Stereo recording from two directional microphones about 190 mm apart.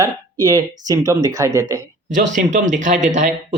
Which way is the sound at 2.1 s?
40° right (ahead or behind).